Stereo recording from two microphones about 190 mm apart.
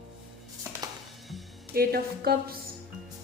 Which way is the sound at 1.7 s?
55° right (ahead or behind).